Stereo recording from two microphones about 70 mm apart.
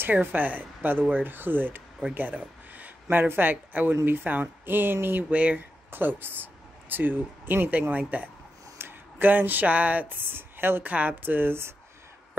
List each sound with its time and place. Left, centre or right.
0.0 s speech: right
5.3 s speech: centre
5.9 s speech: right